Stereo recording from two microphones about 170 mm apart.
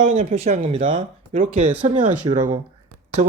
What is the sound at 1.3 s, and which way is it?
Speech, 45° right (ahead or behind).